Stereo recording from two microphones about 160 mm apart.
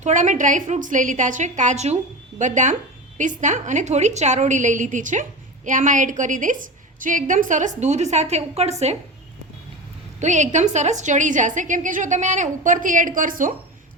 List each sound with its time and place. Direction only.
0.0 s a woman's voice: 50° right (ahead or behind)
10.2 s a woman's voice: 50° right (ahead or behind)